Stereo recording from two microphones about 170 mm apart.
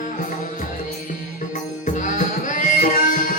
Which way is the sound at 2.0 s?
50° left (ahead or behind).